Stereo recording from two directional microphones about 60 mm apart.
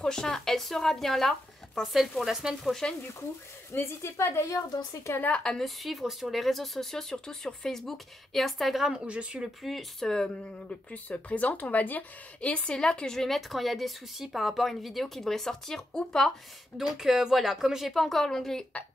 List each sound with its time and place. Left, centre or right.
0.0 s speech: centre
3.7 s speech: left
4.5 s a woman's voice: left
5.3 s a woman's voice: centre
5.8 s speech: centre
9.0 s speech: centre
9.6 s speech: centre
10.9 s a woman's voice: left
16.7 s speech: centre